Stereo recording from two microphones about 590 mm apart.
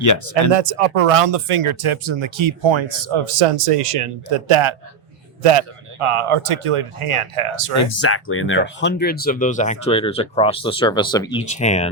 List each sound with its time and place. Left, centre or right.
0.0 s speech: left
0.5 s speech: right
7.8 s speech: left